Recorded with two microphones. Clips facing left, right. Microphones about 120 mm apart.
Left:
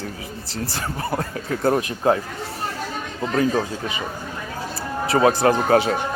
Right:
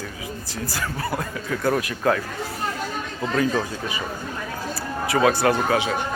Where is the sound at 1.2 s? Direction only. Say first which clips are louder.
Left 2 dB; 40° left (ahead or behind).